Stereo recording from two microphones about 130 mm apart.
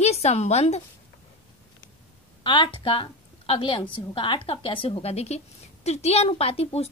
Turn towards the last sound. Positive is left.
turn(degrees=50)  # may be behind; listen again after turning